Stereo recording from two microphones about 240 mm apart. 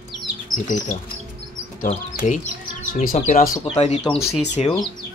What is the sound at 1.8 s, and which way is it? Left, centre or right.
Speech, left.